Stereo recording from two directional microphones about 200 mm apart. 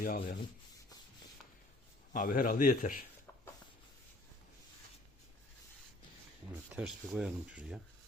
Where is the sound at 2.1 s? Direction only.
45° left (ahead or behind).